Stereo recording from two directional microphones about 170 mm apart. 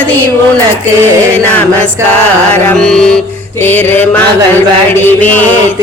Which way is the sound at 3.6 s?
10° left (ahead or behind).